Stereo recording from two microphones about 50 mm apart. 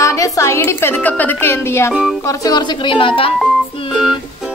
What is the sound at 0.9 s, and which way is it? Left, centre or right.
Speech, left.